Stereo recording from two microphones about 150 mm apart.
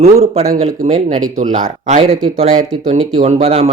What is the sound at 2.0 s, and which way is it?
Speech, 45° right (ahead or behind).